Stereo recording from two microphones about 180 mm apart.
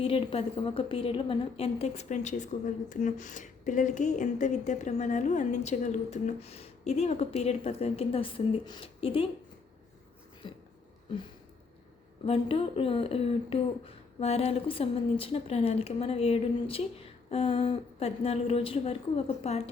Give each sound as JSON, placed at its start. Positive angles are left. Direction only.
{"t": 0.0, "sound": "a woman's voice", "side_deg": 30}
{"t": 12.2, "sound": "a woman's voice", "side_deg": 30}